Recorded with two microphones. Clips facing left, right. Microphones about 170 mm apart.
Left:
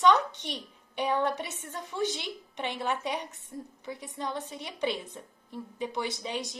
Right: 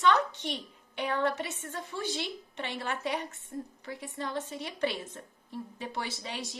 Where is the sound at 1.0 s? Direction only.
15° left (ahead or behind).